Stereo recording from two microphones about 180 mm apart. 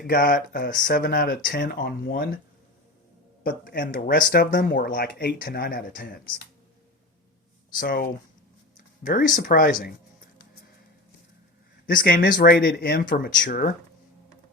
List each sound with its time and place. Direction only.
0.1 s speech: 55° left (ahead or behind)
3.4 s speech: 50° left (ahead or behind)
7.8 s speech: 50° left (ahead or behind)
9.0 s speech: 45° left (ahead or behind)
11.9 s speech: 50° left (ahead or behind)